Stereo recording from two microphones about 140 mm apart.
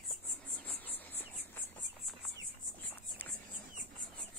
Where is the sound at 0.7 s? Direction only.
10° left (ahead or behind).